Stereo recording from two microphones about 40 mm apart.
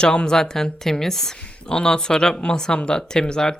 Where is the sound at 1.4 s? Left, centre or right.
Left.